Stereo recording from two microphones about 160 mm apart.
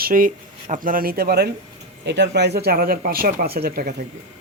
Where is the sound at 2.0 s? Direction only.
90° right; by 3.9 s 75° right (ahead or behind).